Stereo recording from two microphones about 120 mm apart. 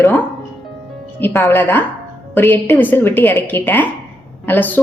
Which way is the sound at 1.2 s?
20° left (ahead or behind).